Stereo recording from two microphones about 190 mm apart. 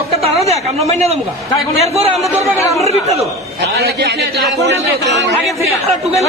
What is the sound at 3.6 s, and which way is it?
A man's voice, 60° right (ahead or behind).